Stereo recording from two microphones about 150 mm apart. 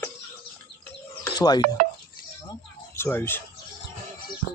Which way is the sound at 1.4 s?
30° left (ahead or behind).